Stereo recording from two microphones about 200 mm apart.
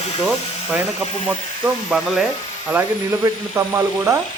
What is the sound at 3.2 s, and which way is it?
Speech, 15° right (ahead or behind).